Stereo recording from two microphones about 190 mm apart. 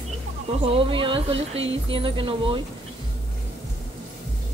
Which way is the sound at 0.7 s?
30° right (ahead or behind).